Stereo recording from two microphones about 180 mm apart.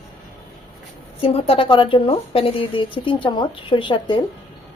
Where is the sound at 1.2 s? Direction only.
30° left (ahead or behind).